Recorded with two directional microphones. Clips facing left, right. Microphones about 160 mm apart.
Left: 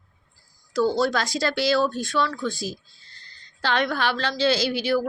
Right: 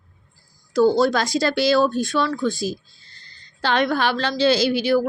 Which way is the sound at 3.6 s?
20° right (ahead or behind).